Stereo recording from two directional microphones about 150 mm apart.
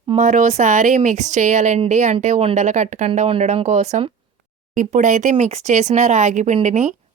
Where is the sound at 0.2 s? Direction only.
55° right (ahead or behind).